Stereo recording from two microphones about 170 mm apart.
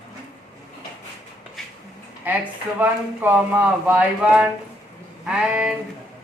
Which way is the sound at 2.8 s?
10° right (ahead or behind).